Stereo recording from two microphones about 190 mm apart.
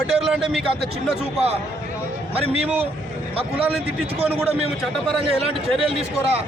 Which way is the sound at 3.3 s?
30° right (ahead or behind).